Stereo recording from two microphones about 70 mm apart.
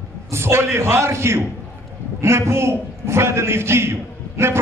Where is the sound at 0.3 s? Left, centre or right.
Right.